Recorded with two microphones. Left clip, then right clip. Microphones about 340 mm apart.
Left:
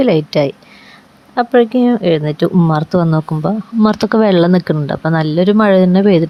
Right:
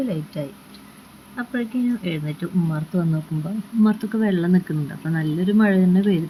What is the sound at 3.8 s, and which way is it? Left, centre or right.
Speech, left.